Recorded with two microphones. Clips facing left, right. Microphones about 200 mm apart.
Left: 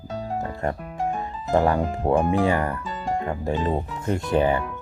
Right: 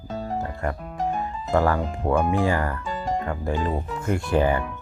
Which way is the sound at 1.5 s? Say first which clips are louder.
Left 2 dB; 20° left (ahead or behind).